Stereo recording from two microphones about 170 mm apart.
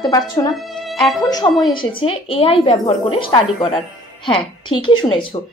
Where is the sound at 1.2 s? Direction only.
20° left (ahead or behind).